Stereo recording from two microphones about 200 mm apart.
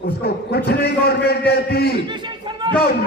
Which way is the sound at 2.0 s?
20° right (ahead or behind).